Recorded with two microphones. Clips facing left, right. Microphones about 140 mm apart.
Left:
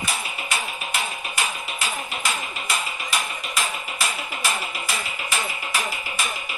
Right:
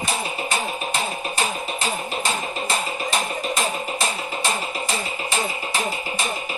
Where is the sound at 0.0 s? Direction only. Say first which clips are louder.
Right 4 dB; 30° right (ahead or behind).